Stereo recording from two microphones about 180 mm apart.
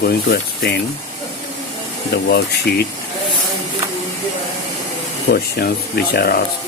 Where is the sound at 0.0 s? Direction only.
60° left (ahead or behind).